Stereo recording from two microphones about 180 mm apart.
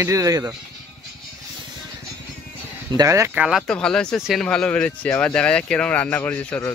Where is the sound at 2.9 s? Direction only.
20° right (ahead or behind).